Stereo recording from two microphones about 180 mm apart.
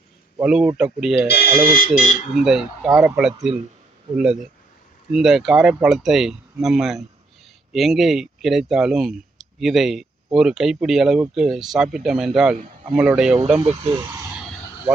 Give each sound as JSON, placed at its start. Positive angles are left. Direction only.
{"t": 0.3, "sound": "speech", "side_deg": -5}
{"t": 1.3, "sound": "speech", "side_deg": 60}
{"t": 2.4, "sound": "speech", "side_deg": -5}
{"t": 13.6, "sound": "speech", "side_deg": -25}